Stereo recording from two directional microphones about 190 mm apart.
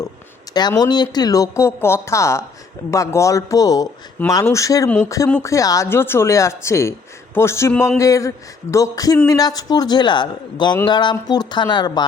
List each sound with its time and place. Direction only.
0.5 s speech: 20° left (ahead or behind)